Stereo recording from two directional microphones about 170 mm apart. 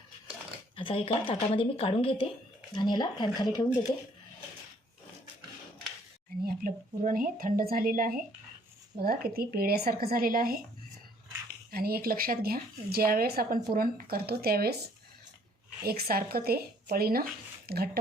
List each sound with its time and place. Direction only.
0.8 s speech: 30° left (ahead or behind)
6.4 s speech: 60° right (ahead or behind)
11.7 s speech: 65° right (ahead or behind)
15.8 s speech: 65° right (ahead or behind)